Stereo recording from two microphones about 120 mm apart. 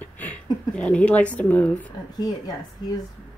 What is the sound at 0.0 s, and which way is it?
Speech, 10° left (ahead or behind).